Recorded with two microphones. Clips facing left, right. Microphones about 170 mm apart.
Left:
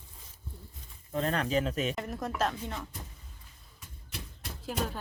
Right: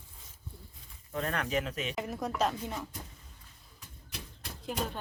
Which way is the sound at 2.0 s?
Centre (ahead or behind).